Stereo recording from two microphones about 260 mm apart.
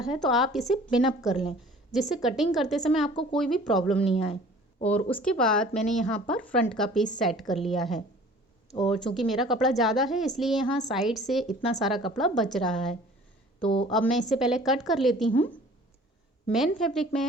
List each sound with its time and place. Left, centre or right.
0.0 s speech: centre
4.0 s speech: left
4.9 s speech: centre
13.7 s speech: centre
13.9 s speech: centre
16.5 s speech: centre